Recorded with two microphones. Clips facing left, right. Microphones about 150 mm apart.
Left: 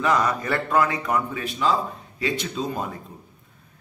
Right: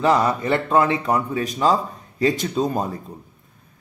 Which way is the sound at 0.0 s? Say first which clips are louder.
Right 4 dB; 30° right (ahead or behind).